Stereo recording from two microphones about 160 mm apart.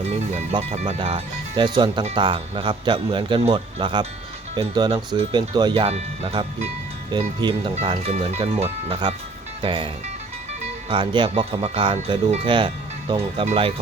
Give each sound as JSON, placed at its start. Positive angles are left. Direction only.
{"t": 0.7, "sound": "a man's voice", "side_deg": -40}